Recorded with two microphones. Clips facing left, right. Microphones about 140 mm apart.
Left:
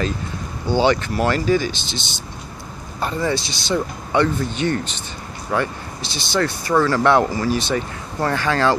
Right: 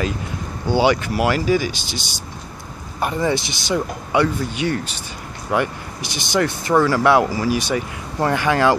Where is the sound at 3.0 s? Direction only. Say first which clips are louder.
Right 2 dB; 15° right (ahead or behind).